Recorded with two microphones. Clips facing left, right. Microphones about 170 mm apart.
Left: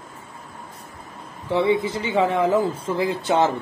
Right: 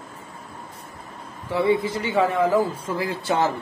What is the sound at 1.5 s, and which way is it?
Speech, 25° left (ahead or behind).